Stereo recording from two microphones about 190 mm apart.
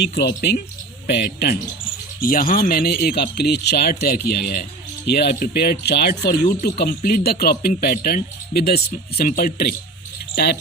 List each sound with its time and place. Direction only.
0.0 s speech: 60° left (ahead or behind)
2.2 s speech: 50° left (ahead or behind)